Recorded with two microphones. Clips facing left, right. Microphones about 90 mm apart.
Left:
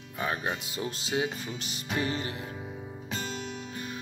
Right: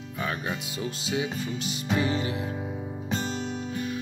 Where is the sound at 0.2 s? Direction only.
30° left (ahead or behind).